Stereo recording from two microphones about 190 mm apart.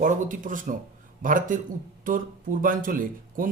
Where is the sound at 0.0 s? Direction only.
45° right (ahead or behind).